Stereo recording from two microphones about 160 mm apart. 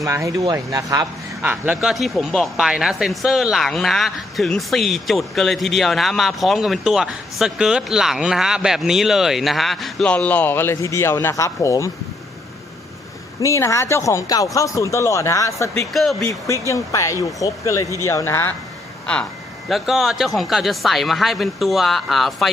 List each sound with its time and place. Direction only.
0.0 s speech: 20° right (ahead or behind)
1.5 s speech: 10° right (ahead or behind); by 11.9 s 20° left (ahead or behind)
13.4 s speech: 20° left (ahead or behind)
15.9 s speech: centre (ahead or behind)
16.2 s speech: 20° left (ahead or behind)
19.6 s speech: centre (ahead or behind)